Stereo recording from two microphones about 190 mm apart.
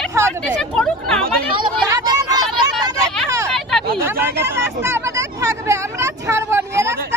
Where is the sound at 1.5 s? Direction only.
25° right (ahead or behind).